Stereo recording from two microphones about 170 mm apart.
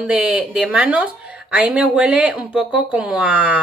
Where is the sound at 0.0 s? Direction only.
5° right (ahead or behind).